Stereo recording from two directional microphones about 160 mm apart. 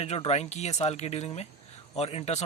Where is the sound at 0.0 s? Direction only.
40° left (ahead or behind).